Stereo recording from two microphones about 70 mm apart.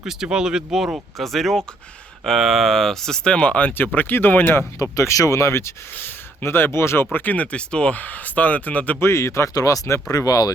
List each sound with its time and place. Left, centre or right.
0.0 s speech: centre; by 4.6 s left
4.8 s speech: left
9.0 s speech: left